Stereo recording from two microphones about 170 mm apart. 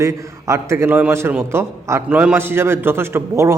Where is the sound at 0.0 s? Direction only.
15° right (ahead or behind).